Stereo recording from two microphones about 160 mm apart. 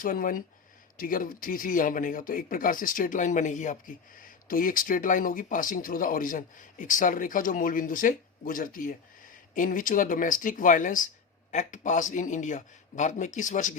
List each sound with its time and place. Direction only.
0.0 s a man's voice: 60° left (ahead or behind)